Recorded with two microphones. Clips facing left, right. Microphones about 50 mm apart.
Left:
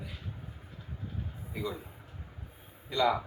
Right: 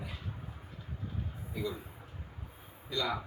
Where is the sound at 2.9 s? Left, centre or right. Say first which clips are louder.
Left 7 dB; left.